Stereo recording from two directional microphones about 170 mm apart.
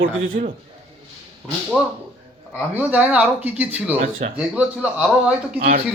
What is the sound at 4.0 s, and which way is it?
Speech, 55° right (ahead or behind).